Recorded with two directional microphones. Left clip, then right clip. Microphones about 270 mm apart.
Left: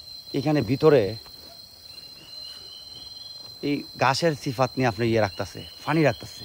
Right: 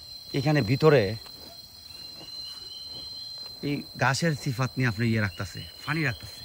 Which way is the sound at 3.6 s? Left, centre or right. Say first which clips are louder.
Left 4 dB; centre.